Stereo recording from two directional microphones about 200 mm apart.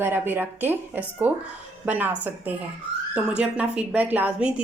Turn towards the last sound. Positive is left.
turn(degrees=-5)  # may be behind; listen again after turning